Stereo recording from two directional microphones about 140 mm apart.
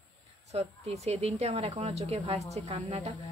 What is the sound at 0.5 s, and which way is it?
A woman's voice, 50° right (ahead or behind).